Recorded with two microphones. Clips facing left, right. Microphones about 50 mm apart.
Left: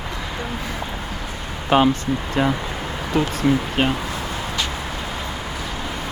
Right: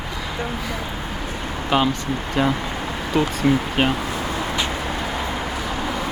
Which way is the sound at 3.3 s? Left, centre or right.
Centre.